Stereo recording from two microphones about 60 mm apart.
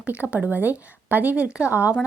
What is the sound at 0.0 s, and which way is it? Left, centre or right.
A woman's voice, right.